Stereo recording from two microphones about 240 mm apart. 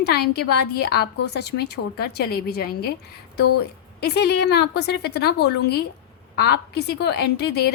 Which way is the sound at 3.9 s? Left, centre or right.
Left.